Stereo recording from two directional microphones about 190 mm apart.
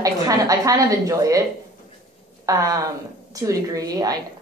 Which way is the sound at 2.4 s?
15° right (ahead or behind).